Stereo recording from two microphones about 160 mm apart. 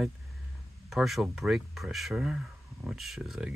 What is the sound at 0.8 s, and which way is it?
Speech, centre (ahead or behind).